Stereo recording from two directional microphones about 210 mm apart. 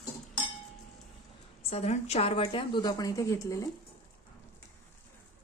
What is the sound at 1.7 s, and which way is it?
A woman's voice, 30° left (ahead or behind).